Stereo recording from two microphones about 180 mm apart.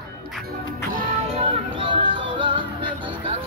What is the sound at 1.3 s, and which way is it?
Music, 30° right (ahead or behind).